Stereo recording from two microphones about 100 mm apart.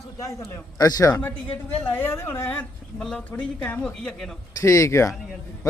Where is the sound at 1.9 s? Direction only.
20° left (ahead or behind).